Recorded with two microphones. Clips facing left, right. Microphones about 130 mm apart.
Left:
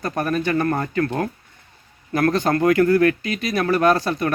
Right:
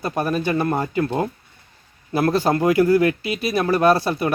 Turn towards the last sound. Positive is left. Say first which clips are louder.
# right 1 dB
turn(degrees=-10)  # may be behind; listen again after turning